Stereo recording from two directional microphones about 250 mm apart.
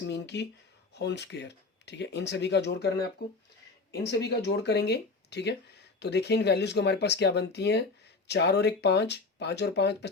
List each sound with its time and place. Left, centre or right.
0.1 s speech: left